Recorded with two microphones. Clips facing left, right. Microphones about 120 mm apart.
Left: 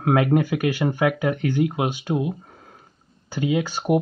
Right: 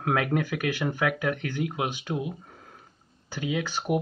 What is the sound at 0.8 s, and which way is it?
Speech, 40° left (ahead or behind).